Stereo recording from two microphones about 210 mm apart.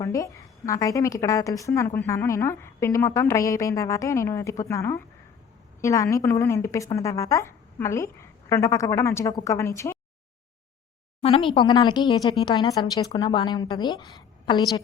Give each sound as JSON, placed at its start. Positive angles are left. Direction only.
{"t": 0.0, "sound": "a woman's voice", "side_deg": 15}
{"t": 11.2, "sound": "a woman's voice", "side_deg": 30}